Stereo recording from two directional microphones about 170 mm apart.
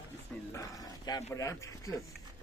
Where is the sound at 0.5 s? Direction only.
20° left (ahead or behind).